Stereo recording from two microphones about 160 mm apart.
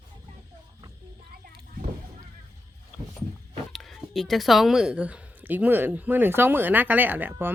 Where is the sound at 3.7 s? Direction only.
Centre (ahead or behind).